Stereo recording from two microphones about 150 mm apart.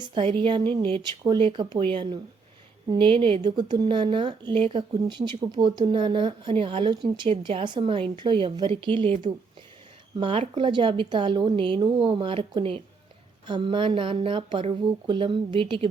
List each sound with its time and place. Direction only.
0.0 s speech: 35° right (ahead or behind)
10.2 s speech: 35° right (ahead or behind)